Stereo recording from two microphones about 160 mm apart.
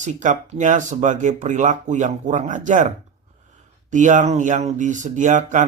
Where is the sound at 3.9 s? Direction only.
50° right (ahead or behind).